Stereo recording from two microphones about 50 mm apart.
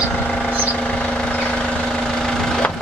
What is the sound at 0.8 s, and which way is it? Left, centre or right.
Vehicle, left.